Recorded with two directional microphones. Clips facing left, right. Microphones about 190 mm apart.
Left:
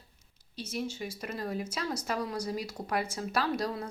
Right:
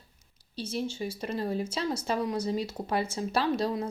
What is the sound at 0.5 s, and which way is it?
Speech, 30° right (ahead or behind).